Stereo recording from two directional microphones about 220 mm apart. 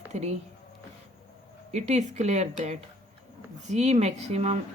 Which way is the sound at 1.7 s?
30° right (ahead or behind).